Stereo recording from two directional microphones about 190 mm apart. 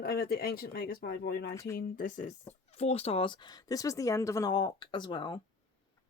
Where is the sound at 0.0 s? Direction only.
55° left (ahead or behind).